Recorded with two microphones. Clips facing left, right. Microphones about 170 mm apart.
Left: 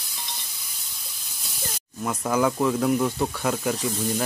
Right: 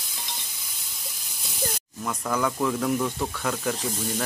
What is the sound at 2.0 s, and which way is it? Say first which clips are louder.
Speech: left 4 dB; 20° left (ahead or behind).